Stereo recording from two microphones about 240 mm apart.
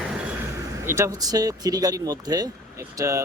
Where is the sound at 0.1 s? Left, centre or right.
Centre.